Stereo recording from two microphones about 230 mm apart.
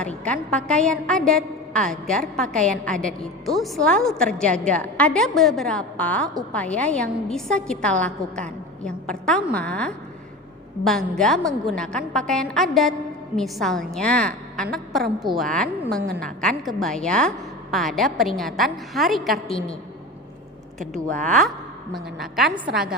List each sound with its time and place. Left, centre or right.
0.0 s a woman's voice: centre
22.2 s a woman's voice: centre